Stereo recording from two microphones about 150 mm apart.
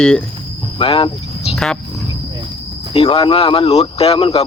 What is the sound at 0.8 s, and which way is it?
Vehicle, 35° left (ahead or behind).